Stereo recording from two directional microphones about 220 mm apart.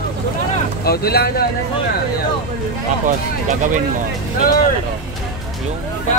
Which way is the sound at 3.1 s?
35° right (ahead or behind).